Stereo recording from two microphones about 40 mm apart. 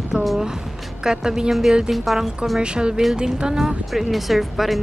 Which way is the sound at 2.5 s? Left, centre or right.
Right.